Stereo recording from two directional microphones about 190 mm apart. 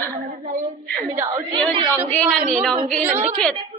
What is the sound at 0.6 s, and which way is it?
A woman's voice, 30° right (ahead or behind).